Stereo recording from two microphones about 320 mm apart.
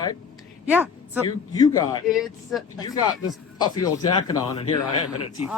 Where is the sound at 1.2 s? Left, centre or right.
Centre.